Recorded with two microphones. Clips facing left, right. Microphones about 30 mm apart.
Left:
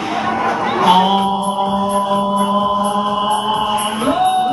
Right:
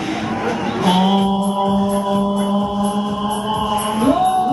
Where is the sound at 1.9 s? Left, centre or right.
Left.